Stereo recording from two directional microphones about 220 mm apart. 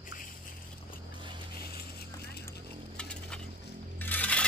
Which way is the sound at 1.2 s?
20° right (ahead or behind).